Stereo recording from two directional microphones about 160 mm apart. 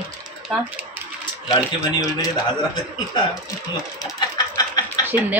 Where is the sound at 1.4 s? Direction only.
25° left (ahead or behind).